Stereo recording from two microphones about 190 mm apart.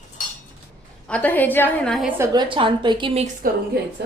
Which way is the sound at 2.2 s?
25° right (ahead or behind).